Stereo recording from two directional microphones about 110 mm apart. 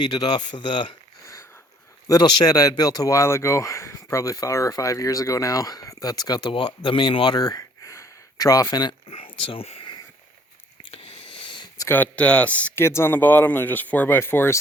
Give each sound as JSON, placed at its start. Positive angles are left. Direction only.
{"t": 0.0, "sound": "speech", "side_deg": 40}
{"t": 1.2, "sound": "sniff", "side_deg": 30}
{"t": 2.0, "sound": "speech", "side_deg": 35}
{"t": 6.5, "sound": "speech", "side_deg": 50}
{"t": 7.3, "sound": "a sound", "side_deg": 35}
{"t": 9.0, "sound": "speech", "side_deg": 55}
{"t": 10.9, "sound": "a sound", "side_deg": 60}
{"t": 11.9, "sound": "speech", "side_deg": 15}
{"t": 12.8, "sound": "speech", "side_deg": 25}